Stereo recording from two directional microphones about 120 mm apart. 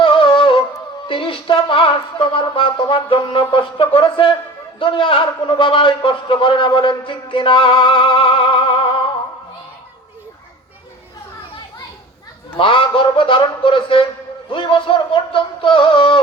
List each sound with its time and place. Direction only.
0.0 s music: 45° left (ahead or behind)
1.0 s a man's voice: 45° left (ahead or behind)
12.5 s a man's voice: 45° left (ahead or behind)